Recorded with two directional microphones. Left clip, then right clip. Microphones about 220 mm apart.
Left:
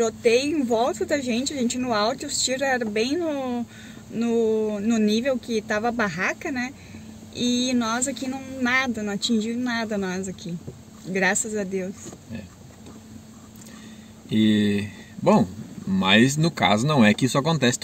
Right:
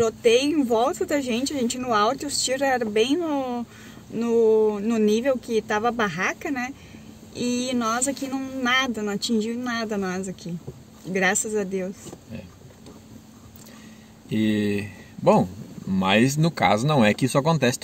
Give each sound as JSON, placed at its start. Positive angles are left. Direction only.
{"t": 0.0, "sound": "a woman's voice", "side_deg": -10}
{"t": 14.3, "sound": "speech", "side_deg": 20}